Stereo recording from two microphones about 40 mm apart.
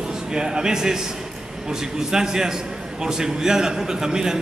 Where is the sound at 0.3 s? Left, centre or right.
Centre.